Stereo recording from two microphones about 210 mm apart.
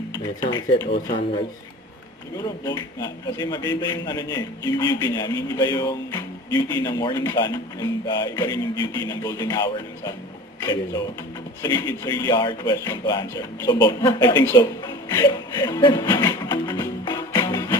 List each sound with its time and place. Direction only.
0.2 s a man's voice: 20° left (ahead or behind)
2.6 s a man's voice: 20° left (ahead or behind)
14.4 s chuckle: 20° left (ahead or behind)